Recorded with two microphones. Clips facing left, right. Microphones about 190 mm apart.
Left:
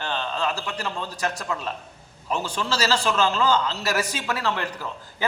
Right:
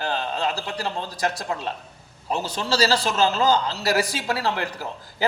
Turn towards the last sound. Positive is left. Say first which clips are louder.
# right 2 dB
turn(degrees=-35)  # may be behind; listen again after turning